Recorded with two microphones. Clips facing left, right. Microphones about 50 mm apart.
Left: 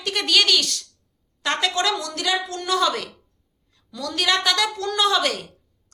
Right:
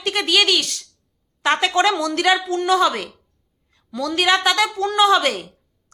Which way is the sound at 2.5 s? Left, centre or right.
Centre.